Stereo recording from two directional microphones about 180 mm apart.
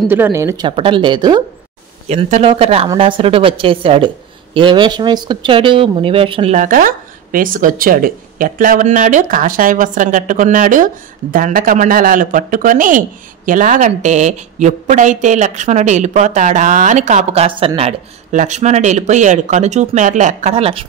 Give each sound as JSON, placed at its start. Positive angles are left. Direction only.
{"t": 0.1, "sound": "speech", "side_deg": -15}
{"t": 0.7, "sound": "speech", "side_deg": -30}
{"t": 2.0, "sound": "speech", "side_deg": -35}